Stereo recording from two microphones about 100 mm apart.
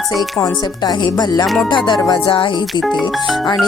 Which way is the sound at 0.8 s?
45° left (ahead or behind).